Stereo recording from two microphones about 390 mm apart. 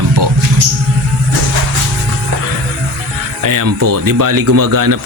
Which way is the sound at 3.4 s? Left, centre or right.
Right.